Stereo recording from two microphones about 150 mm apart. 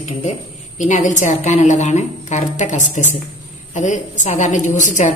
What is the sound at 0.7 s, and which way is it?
A woman's voice, 55° left (ahead or behind).